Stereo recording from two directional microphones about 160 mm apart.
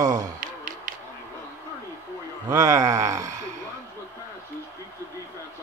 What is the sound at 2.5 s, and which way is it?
Speech, 15° right (ahead or behind).